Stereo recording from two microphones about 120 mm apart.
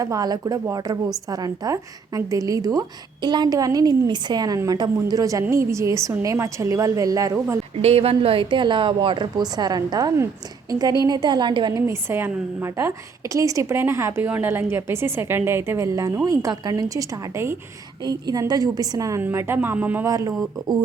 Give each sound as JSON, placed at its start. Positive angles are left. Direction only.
{"t": 0.0, "sound": "a woman's voice", "side_deg": -30}
{"t": 7.8, "sound": "a woman's voice", "side_deg": -55}
{"t": 11.9, "sound": "a woman's voice", "side_deg": -20}
{"t": 18.0, "sound": "a woman's voice", "side_deg": -30}
{"t": 20.1, "sound": "a woman's voice", "side_deg": -30}